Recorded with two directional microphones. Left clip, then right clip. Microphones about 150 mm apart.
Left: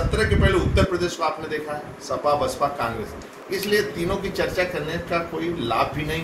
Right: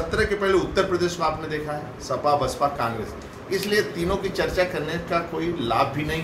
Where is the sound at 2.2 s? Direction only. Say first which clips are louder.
Even; 15° right (ahead or behind).